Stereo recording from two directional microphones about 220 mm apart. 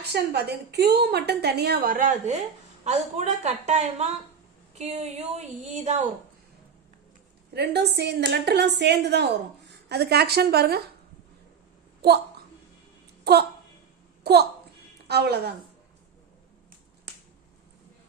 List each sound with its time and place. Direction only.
0.0 s a woman's voice: 50° right (ahead or behind); by 6.0 s 30° right (ahead or behind)
7.5 s a woman's voice: 50° right (ahead or behind)
12.0 s a woman's voice: 45° right (ahead or behind)
13.3 s a woman's voice: 45° right (ahead or behind)